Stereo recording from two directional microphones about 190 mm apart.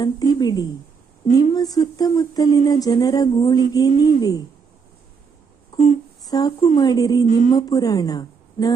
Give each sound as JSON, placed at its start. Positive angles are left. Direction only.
{"t": 0.3, "sound": "speech", "side_deg": 20}
{"t": 5.7, "sound": "a sound", "side_deg": 35}
{"t": 6.2, "sound": "speech", "side_deg": 20}
{"t": 7.3, "sound": "speech", "side_deg": 40}
{"t": 7.5, "sound": "a woman's voice", "side_deg": 20}